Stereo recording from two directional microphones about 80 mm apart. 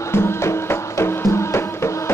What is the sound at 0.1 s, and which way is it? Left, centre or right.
Music, left.